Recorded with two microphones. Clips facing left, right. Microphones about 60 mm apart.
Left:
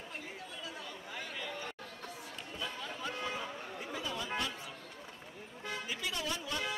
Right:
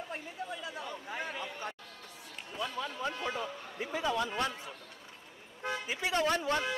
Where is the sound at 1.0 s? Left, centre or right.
Right.